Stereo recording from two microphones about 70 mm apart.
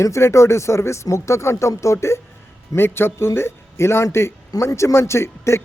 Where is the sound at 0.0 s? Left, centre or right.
Left.